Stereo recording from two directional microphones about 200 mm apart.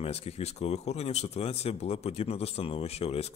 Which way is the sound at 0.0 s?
30° left (ahead or behind).